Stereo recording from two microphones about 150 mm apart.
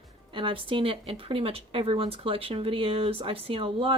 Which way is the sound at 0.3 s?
35° right (ahead or behind).